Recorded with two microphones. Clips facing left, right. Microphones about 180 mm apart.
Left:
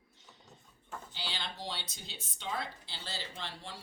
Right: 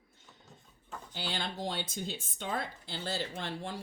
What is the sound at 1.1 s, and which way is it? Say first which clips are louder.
Speech: right 7 dB; 50° right (ahead or behind).